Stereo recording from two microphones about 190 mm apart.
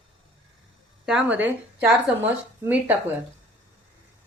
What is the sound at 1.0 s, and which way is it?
Speech, 5° right (ahead or behind).